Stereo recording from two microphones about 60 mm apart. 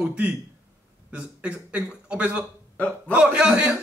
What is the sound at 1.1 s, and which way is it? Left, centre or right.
A man's voice, right.